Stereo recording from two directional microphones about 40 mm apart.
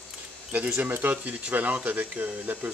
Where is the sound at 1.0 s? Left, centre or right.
Right.